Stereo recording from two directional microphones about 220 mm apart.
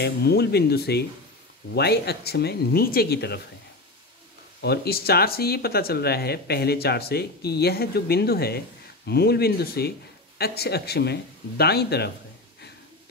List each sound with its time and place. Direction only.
0.0 s speech: 45° left (ahead or behind)
4.6 s speech: 45° left (ahead or behind)